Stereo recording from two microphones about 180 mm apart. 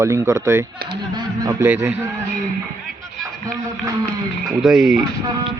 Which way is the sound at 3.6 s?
20° right (ahead or behind).